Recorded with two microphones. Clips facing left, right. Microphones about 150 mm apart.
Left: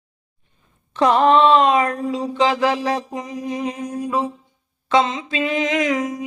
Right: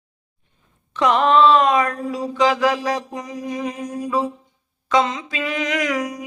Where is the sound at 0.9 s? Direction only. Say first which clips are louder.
Left 1 dB; 30° left (ahead or behind).